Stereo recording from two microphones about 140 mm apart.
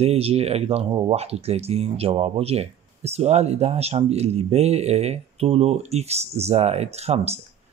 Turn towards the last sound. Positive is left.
turn(degrees=-50)  # may be behind; listen again after turning